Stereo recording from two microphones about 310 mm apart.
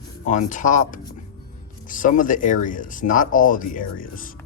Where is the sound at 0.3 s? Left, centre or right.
Left.